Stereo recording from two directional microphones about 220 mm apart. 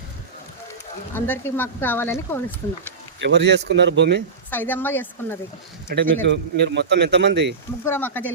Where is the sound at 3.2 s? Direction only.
50° right (ahead or behind).